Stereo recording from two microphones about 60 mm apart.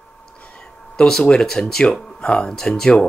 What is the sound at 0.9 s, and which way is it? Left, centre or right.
Speech, centre.